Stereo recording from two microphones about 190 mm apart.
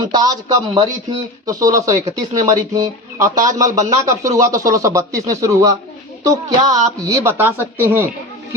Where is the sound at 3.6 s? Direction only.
40° right (ahead or behind).